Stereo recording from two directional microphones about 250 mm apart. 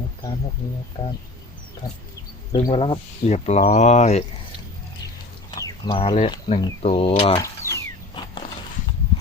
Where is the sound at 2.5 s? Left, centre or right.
Left.